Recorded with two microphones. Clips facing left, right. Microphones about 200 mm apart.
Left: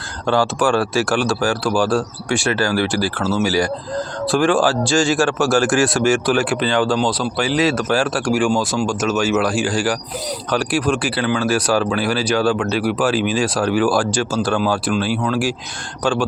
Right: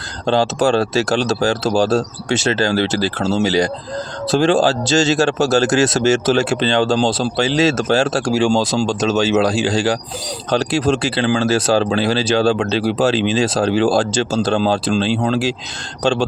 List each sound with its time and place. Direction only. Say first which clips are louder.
0.3 s speech: right 2 dB; 20° right (ahead or behind)